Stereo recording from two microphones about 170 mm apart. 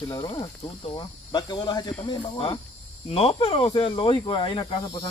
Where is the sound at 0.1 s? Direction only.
25° left (ahead or behind).